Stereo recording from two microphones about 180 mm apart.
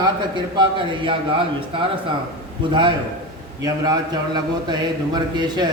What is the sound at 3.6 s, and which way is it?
A man's voice, 25° right (ahead or behind).